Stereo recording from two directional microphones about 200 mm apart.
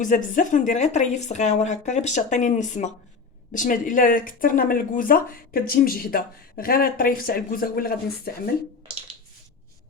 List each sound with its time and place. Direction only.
0.0 s speech: 40° left (ahead or behind)